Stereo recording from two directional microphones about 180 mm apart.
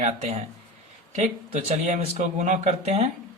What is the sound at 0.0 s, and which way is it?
Speech, 40° right (ahead or behind).